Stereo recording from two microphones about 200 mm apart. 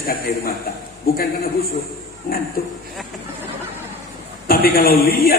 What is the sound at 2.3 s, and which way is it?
Speech, 45° left (ahead or behind).